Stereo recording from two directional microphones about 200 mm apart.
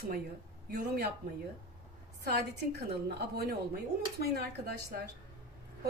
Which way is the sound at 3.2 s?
50° right (ahead or behind).